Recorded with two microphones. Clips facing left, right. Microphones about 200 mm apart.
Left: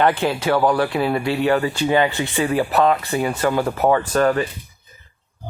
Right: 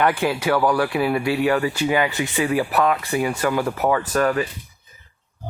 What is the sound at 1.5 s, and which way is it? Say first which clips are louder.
Speech: left 1 dB; 25° left (ahead or behind).